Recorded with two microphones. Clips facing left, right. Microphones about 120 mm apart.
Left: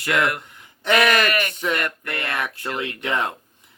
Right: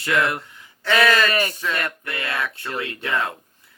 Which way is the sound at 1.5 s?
20° left (ahead or behind).